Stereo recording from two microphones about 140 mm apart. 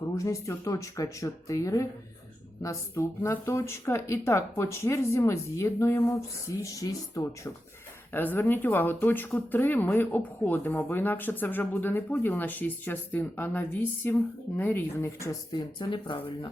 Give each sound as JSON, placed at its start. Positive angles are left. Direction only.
{"t": 0.3, "sound": "speech", "side_deg": 25}
{"t": 15.5, "sound": "speech", "side_deg": 35}